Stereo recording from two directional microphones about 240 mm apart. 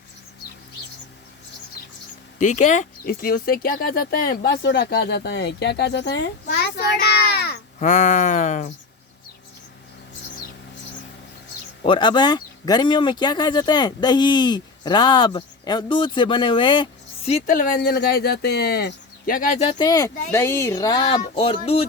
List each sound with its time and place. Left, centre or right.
2.4 s speech: left
11.8 s speech: left
17.7 s speech: left